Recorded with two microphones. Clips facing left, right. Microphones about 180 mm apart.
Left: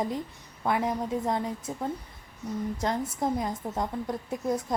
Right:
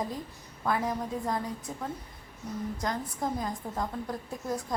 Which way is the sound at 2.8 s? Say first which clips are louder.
Left 4 dB; 25° left (ahead or behind).